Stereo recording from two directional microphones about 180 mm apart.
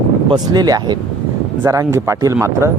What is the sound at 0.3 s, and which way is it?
Speech, 20° right (ahead or behind).